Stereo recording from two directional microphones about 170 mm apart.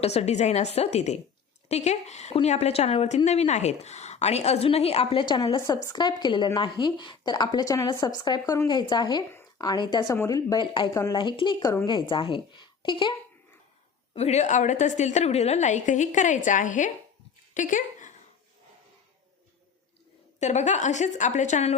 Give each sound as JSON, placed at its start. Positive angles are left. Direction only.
{"t": 0.0, "sound": "a woman's voice", "side_deg": 40}
{"t": 14.1, "sound": "a woman's voice", "side_deg": 40}
{"t": 17.5, "sound": "a sound", "side_deg": 50}
{"t": 20.4, "sound": "a woman's voice", "side_deg": 45}